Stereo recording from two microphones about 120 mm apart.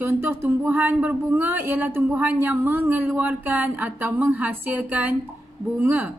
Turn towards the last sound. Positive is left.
turn(degrees=-15)  # may be behind; listen again after turning